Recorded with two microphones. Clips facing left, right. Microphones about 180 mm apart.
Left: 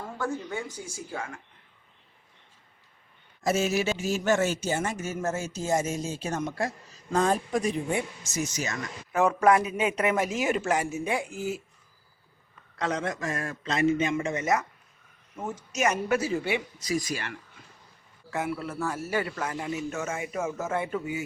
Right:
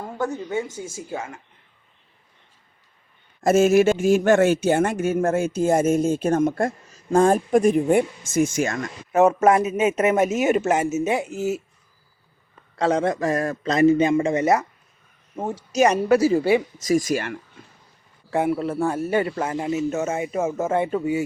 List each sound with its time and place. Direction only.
0.0 s a man's voice: 20° right (ahead or behind)
3.4 s speech: 50° right (ahead or behind)
9.1 s a man's voice: 25° right (ahead or behind)
12.7 s a man's voice: 30° right (ahead or behind); by 17.3 s 45° right (ahead or behind)
18.3 s a man's voice: 30° right (ahead or behind)